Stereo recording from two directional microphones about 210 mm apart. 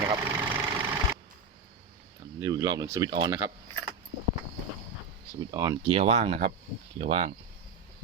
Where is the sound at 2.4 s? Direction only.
15° right (ahead or behind).